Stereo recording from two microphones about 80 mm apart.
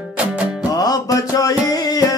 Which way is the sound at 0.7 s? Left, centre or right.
Left.